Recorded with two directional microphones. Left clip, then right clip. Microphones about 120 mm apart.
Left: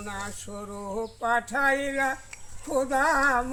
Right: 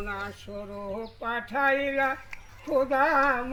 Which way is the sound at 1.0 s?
25° left (ahead or behind).